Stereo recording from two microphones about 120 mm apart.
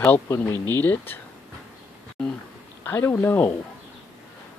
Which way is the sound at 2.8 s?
20° left (ahead or behind).